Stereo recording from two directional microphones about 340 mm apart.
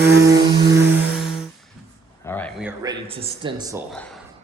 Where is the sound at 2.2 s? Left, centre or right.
Centre.